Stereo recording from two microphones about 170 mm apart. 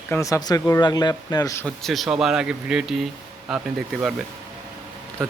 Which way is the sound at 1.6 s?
Centre (ahead or behind).